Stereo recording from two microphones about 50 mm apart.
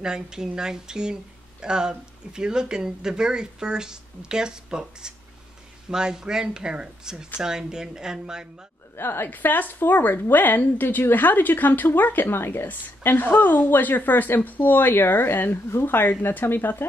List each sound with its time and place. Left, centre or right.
0.0 s speech: centre
8.9 s speech: left
9.3 s a woman's voice: left
12.6 s a woman's voice: left
15.0 s speech: left